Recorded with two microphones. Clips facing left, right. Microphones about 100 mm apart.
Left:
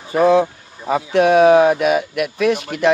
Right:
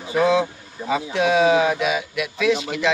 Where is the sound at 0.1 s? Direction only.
50° left (ahead or behind).